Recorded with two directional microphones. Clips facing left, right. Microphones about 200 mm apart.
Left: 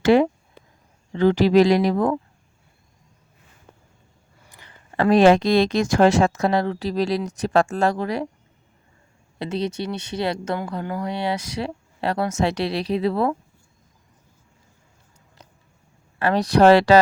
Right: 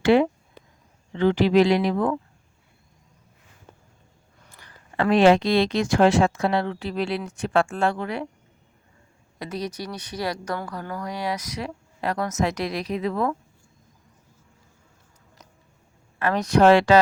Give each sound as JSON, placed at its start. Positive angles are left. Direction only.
{"t": 0.0, "sound": "speech", "side_deg": 40}
{"t": 4.4, "sound": "a sound", "side_deg": 15}
{"t": 4.9, "sound": "speech", "side_deg": 40}
{"t": 9.4, "sound": "speech", "side_deg": 25}
{"t": 16.1, "sound": "speech", "side_deg": 30}